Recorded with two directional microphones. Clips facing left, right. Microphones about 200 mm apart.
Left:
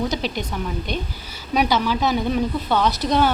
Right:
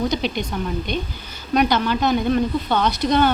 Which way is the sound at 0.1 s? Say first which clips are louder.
Right 2 dB; centre (ahead or behind).